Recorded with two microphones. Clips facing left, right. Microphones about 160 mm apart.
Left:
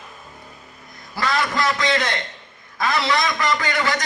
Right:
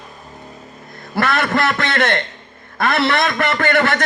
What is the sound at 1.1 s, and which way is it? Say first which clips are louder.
A man's voice: right 4 dB; 60° right (ahead or behind).